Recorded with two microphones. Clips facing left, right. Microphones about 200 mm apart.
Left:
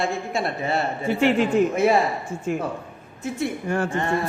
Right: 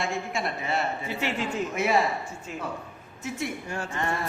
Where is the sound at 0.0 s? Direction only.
35° left (ahead or behind).